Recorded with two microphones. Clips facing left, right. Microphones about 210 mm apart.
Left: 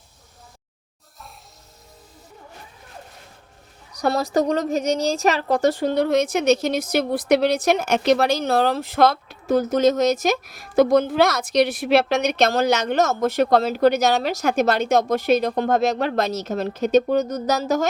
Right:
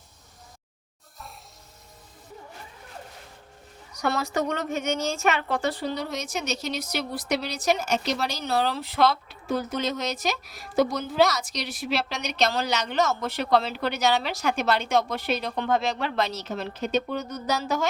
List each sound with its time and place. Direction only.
3.9 s a woman's voice: 35° left (ahead or behind)